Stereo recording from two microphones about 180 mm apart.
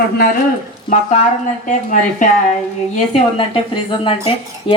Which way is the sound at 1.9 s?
45° left (ahead or behind).